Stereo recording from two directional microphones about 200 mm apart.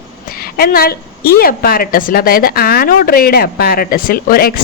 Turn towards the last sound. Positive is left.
turn(degrees=45)  # may be behind; listen again after turning